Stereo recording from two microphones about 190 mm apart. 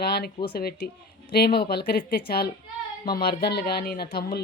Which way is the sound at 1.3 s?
55° left (ahead or behind).